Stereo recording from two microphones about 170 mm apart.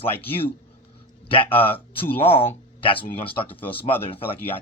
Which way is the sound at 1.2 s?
30° left (ahead or behind).